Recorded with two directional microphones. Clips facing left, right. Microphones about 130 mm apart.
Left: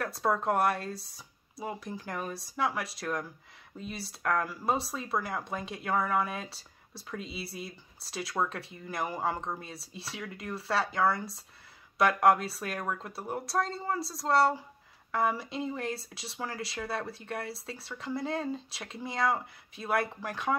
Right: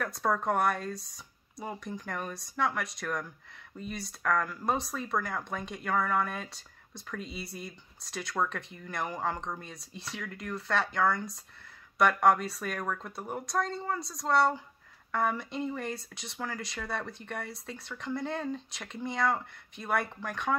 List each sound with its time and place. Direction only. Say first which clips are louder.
0.0 s speech: left 1 dB; 5° left (ahead or behind)